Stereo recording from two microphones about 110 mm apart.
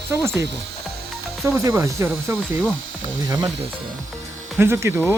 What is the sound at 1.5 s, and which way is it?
Speech, 25° right (ahead or behind).